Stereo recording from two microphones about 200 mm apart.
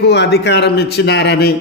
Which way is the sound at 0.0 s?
55° left (ahead or behind).